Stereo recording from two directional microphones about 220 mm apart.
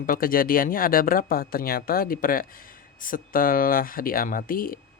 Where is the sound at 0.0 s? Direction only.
40° left (ahead or behind).